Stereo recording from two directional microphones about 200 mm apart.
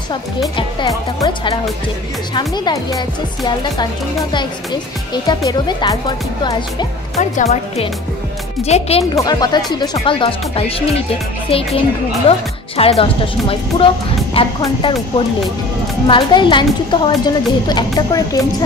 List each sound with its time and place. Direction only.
0.6 s speech: 20° left (ahead or behind)
5.1 s speech: 20° left (ahead or behind)
9.1 s speech: 20° left (ahead or behind)
12.3 s speech: 30° left (ahead or behind)
16.1 s speech: 25° left (ahead or behind)